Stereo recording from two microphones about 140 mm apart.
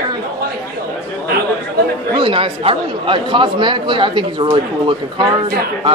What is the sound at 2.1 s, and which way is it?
A man's voice, 40° right (ahead or behind).